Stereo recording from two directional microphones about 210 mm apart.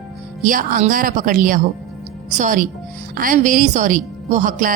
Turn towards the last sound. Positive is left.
turn(degrees=-40)  # may be behind; listen again after turning